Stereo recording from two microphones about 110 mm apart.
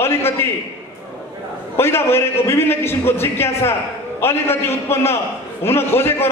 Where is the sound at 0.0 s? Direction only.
20° left (ahead or behind).